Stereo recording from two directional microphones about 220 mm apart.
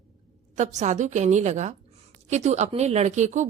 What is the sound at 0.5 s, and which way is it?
A woman's voice, 30° right (ahead or behind).